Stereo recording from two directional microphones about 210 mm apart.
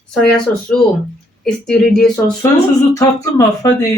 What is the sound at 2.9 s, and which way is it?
Speech, 15° left (ahead or behind).